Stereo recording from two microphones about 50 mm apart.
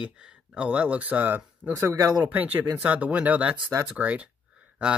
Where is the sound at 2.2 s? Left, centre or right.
Right.